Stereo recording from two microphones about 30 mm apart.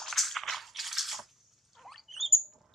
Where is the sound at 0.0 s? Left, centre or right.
Centre.